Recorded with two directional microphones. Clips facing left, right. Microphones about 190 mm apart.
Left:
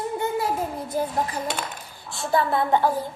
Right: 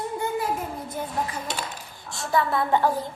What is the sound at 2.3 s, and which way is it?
Speech, 30° left (ahead or behind).